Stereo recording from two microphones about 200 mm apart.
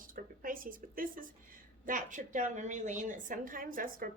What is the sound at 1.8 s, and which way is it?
A woman's voice, 40° right (ahead or behind).